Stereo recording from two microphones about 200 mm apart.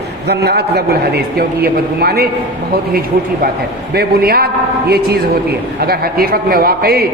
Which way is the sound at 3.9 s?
50° right (ahead or behind).